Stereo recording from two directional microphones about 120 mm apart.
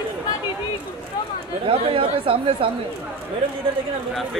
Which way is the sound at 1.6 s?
45° right (ahead or behind).